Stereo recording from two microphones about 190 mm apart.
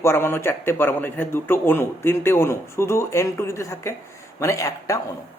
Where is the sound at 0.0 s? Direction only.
10° left (ahead or behind).